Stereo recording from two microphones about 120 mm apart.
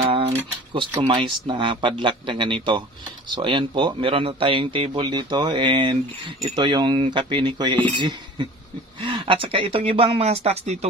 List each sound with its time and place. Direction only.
0.0 s speech: 55° right (ahead or behind)